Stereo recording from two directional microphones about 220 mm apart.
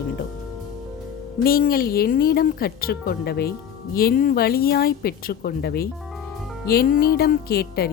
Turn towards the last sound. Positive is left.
turn(degrees=45)  # may be behind; listen again after turning